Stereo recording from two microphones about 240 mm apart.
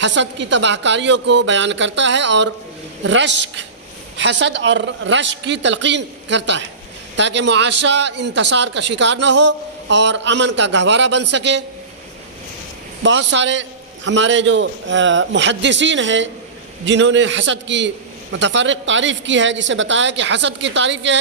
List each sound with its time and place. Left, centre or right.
0.0 s a man's voice: right
13.0 s a man's voice: right